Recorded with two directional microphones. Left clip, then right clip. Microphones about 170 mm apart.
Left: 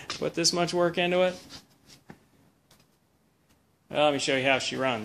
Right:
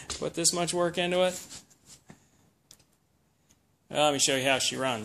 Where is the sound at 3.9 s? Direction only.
15° right (ahead or behind).